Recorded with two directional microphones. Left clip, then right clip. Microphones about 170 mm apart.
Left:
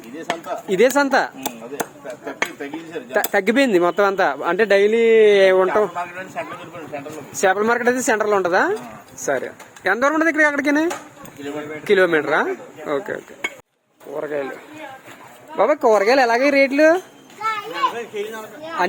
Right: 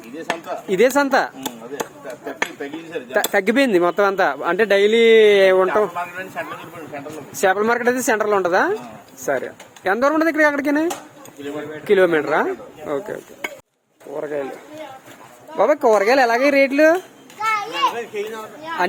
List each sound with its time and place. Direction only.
0.2 s a man's voice: centre (ahead or behind)
4.8 s speech: 15° right (ahead or behind)
5.4 s a man's voice: centre (ahead or behind)
11.9 s a man's voice: centre (ahead or behind)
15.5 s a man's voice: centre (ahead or behind)